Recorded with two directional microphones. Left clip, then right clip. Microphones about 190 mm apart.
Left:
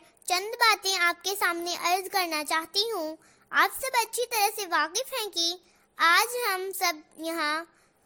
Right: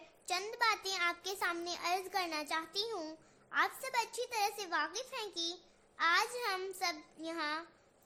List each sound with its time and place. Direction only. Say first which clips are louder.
0.3 s a child's voice: left 10 dB; 40° left (ahead or behind)